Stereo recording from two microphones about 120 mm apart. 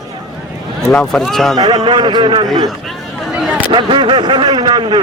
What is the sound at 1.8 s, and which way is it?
Speech, 40° right (ahead or behind).